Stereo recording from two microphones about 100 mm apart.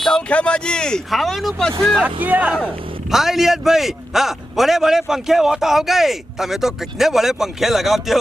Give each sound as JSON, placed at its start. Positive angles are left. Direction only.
{"t": 0.0, "sound": "a man's voice", "side_deg": 10}
{"t": 2.2, "sound": "speech", "side_deg": -15}
{"t": 3.1, "sound": "a man's voice", "side_deg": -5}